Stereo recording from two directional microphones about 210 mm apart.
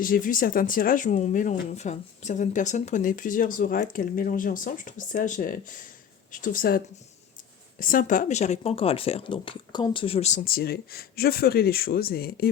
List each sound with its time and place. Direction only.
0.0 s speech: 40° left (ahead or behind)